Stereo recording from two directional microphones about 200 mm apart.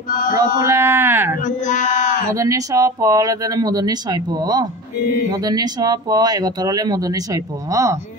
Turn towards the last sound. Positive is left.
turn(degrees=-15)  # may be behind; listen again after turning